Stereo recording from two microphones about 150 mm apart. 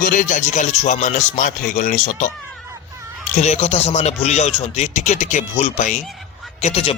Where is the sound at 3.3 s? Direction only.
50° left (ahead or behind).